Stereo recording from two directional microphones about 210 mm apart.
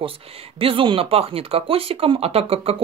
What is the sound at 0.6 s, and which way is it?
Speech, 25° right (ahead or behind).